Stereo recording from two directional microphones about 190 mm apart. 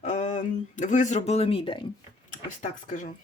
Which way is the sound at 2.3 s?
40° left (ahead or behind).